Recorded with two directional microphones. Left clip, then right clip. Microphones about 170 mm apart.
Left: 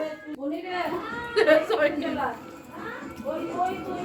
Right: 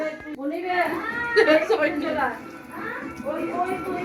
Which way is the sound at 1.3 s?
30° left (ahead or behind).